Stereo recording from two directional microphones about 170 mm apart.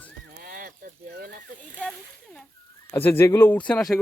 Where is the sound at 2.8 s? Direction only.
15° left (ahead or behind).